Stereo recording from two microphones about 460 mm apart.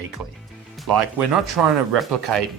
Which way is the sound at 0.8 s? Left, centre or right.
Right.